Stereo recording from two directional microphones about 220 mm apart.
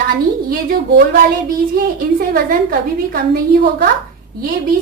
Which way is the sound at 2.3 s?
40° right (ahead or behind).